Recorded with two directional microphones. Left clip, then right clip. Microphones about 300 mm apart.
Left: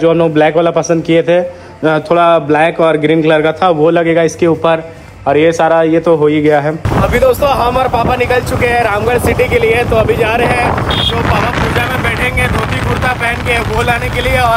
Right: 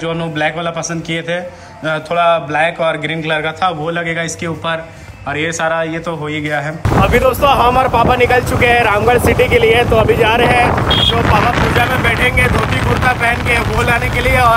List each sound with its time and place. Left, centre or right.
2.0 s a man's voice: centre
5.3 s a man's voice: centre
7.2 s speech: centre
13.0 s speech: centre